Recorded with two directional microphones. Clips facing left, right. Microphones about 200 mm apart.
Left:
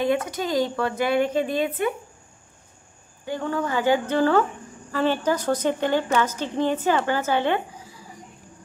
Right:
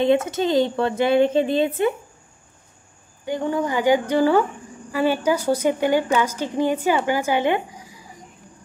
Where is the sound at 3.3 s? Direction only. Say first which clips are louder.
Right 3 dB; 15° right (ahead or behind).